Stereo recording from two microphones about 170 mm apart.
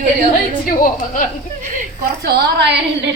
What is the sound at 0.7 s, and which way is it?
Speech, 50° left (ahead or behind).